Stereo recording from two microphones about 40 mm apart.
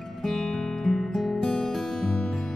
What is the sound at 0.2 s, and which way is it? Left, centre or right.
Music, centre.